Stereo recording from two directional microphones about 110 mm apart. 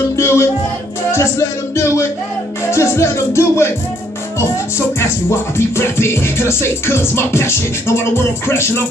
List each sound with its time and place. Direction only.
0.1 s music: 25° left (ahead or behind)